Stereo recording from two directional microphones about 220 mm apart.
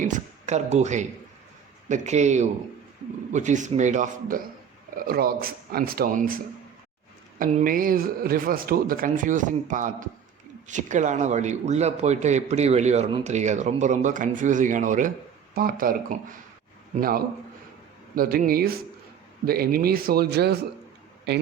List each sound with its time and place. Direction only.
0.0 s a man's voice: 35° right (ahead or behind)